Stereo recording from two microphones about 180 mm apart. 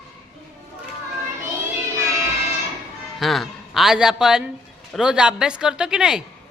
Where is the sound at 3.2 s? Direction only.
Centre (ahead or behind).